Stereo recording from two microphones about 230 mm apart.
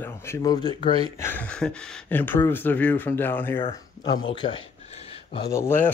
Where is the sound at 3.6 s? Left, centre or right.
Left.